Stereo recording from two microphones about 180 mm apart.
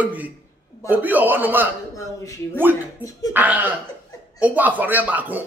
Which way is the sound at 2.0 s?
15° left (ahead or behind).